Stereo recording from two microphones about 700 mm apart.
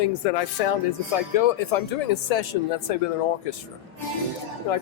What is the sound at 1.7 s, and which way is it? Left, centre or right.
Speech, left.